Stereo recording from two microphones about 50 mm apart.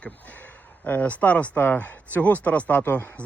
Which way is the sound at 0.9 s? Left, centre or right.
Left.